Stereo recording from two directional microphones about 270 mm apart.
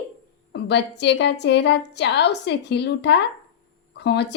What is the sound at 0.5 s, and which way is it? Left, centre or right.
A woman's voice, left.